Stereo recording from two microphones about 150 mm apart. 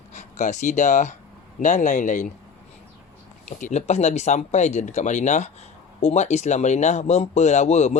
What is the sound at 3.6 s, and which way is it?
Speech, 50° left (ahead or behind).